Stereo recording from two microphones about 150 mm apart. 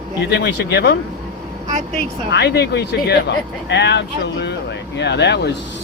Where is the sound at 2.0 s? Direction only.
90° left.